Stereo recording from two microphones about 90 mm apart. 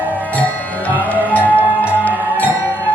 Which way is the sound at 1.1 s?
20° left (ahead or behind).